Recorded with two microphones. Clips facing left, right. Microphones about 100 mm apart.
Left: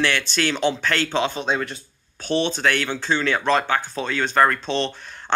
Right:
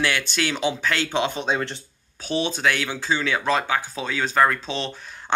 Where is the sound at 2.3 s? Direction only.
5° right (ahead or behind).